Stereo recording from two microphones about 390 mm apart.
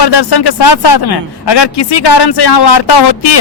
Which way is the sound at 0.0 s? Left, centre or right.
Left.